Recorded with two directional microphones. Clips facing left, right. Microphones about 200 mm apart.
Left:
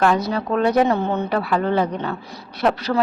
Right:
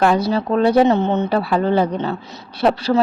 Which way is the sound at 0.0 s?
30° right (ahead or behind).